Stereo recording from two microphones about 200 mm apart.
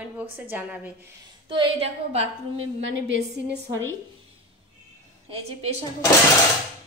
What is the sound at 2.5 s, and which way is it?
Speech, 70° right (ahead or behind).